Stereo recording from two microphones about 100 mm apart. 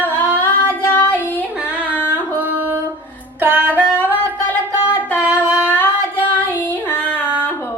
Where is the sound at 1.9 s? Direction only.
20° left (ahead or behind).